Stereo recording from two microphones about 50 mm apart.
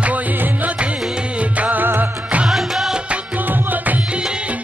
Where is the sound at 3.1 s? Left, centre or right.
Right.